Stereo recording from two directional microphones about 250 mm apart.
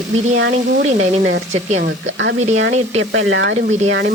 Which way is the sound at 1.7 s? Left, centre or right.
Right.